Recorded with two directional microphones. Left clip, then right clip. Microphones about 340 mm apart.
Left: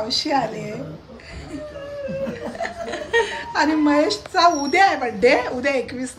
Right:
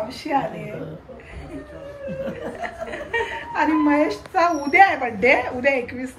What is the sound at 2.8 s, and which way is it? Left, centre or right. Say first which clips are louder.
Chuckle: left 6 dB; centre.